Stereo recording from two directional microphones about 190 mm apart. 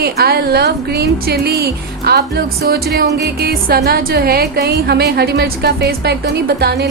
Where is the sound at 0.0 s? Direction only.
55° right (ahead or behind).